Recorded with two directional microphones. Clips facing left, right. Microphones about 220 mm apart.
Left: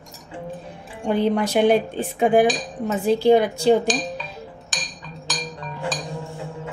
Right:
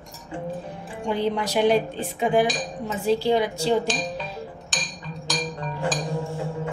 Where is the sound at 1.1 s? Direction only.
50° left (ahead or behind).